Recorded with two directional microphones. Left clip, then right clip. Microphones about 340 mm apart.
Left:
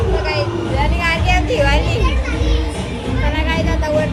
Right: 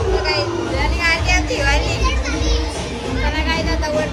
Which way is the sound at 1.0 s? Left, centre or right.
Centre.